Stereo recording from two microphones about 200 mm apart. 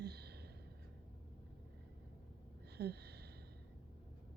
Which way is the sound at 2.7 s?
55° right (ahead or behind).